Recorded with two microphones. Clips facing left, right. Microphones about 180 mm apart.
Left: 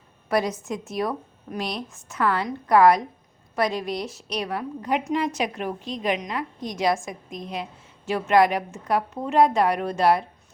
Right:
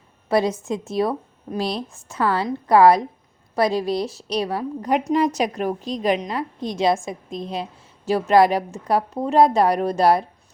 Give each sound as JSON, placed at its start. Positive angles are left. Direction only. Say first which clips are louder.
{"t": 0.3, "sound": "a woman's voice", "louder": "right 4 dB", "side_deg": -25}